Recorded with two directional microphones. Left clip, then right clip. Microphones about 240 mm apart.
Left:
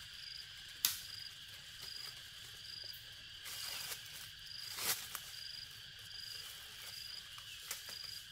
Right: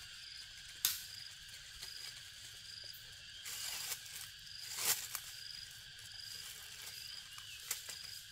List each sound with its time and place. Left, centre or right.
0.8 s cricket: left
3.4 s mechanisms: centre
4.6 s a sound: centre